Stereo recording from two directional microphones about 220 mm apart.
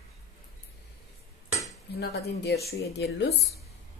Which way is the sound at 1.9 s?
45° left (ahead or behind).